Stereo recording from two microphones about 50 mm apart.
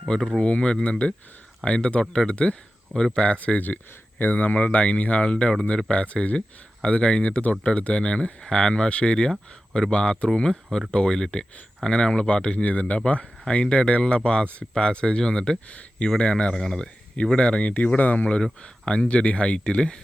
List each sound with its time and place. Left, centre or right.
0.1 s speech: centre
3.4 s speech: left; by 15.5 s centre
15.7 s speech: left
18.6 s speech: left